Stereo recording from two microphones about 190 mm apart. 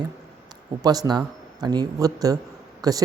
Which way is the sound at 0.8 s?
20° right (ahead or behind).